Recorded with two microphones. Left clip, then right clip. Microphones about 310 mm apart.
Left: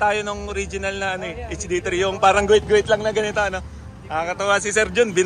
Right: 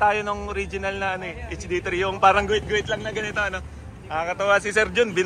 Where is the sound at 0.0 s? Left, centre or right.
Centre.